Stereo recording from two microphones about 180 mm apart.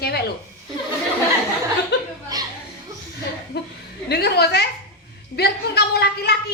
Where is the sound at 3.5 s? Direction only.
65° left (ahead or behind).